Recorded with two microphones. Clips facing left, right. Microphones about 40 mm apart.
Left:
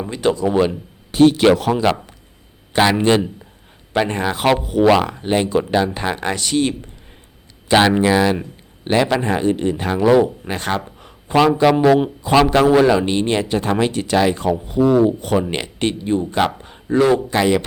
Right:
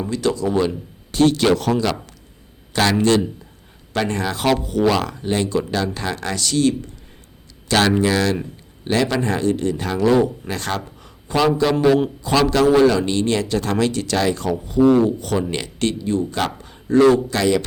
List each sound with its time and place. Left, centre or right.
0.0 s speech: left